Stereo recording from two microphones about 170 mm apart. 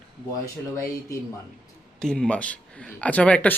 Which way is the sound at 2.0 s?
5° left (ahead or behind).